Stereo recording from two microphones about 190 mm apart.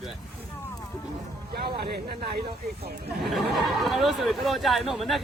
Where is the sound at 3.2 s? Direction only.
Centre (ahead or behind).